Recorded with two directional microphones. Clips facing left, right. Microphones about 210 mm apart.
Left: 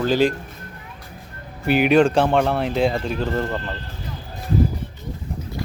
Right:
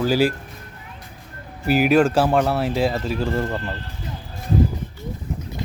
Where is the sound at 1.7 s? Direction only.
Centre (ahead or behind).